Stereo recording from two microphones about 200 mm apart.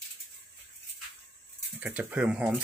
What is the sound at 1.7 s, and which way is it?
Speech, 5° right (ahead or behind).